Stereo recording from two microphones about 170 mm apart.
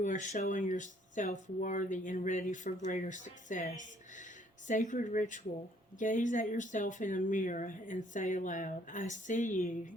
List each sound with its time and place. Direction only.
0.0 s speech: 45° left (ahead or behind)